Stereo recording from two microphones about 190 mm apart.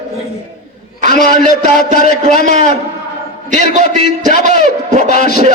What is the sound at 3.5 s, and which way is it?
A man's voice, 40° right (ahead or behind).